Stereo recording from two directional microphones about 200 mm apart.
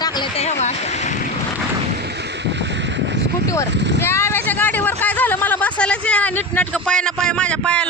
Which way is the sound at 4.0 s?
10° left (ahead or behind).